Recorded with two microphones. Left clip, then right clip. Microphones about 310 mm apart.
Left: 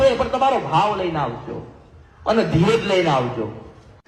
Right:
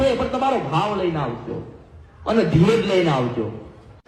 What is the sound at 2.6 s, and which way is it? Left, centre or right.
Speech, left.